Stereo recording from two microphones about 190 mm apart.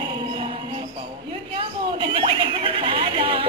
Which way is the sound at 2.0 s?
25° right (ahead or behind).